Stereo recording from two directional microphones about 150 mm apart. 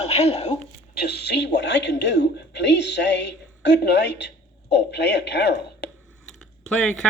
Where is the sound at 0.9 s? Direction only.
90° left.